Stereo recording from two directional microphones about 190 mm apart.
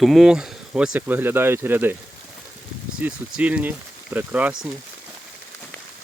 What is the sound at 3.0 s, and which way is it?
Speech, 10° right (ahead or behind).